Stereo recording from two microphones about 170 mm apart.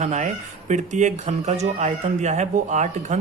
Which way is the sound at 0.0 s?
45° right (ahead or behind).